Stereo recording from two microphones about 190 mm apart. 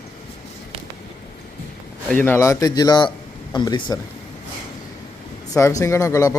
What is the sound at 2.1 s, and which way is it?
A man's voice, 10° left (ahead or behind).